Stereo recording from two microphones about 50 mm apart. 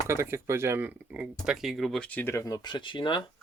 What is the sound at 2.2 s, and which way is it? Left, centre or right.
Speech, left.